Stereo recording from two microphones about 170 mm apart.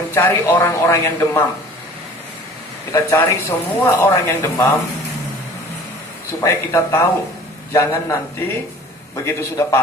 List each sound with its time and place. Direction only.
0.1 s speech: 10° left (ahead or behind)
2.9 s speech: 15° left (ahead or behind)
6.4 s speech: 20° left (ahead or behind)